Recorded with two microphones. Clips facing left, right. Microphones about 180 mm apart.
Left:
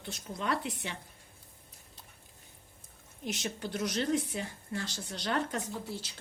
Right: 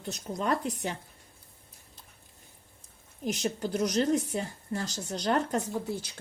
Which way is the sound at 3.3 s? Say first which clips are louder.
Right 6 dB; 40° right (ahead or behind).